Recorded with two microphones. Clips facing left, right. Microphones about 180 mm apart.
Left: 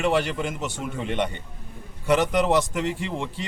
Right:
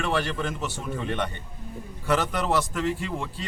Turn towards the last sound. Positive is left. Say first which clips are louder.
# left 2 dB
turn(degrees=20)  # may be behind; listen again after turning